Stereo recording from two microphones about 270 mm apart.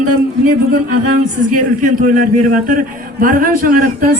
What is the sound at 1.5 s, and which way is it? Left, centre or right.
A man's voice, right.